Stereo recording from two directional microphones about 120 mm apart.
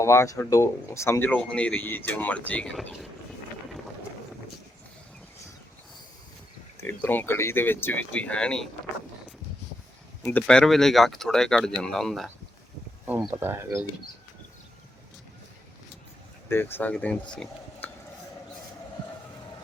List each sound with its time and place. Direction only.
0.0 s speech: 25° left (ahead or behind)
6.8 s speech: 15° left (ahead or behind)
10.4 s speech: 5° left (ahead or behind)
13.1 s speech: 10° right (ahead or behind)
13.3 s speech: 20° right (ahead or behind)
16.5 s speech: 20° left (ahead or behind)
17.3 s a sound: 10° left (ahead or behind)